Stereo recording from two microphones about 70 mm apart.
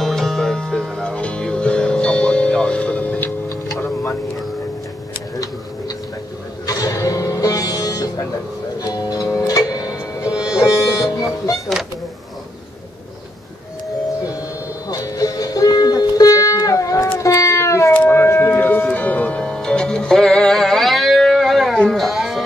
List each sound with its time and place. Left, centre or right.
0.0 s music: centre
6.6 s music: left
14.9 s music: left
17.2 s cat: left
17.9 s music: left; by 22.4 s centre